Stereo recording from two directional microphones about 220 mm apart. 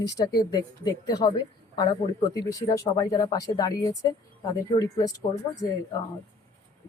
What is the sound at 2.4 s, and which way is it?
Speech, 15° left (ahead or behind).